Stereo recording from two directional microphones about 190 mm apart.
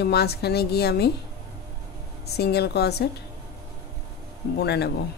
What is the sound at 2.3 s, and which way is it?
Speech, 60° left (ahead or behind).